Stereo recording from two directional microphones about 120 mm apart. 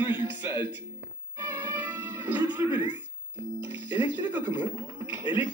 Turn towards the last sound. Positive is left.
turn(degrees=-15)  # may be behind; listen again after turning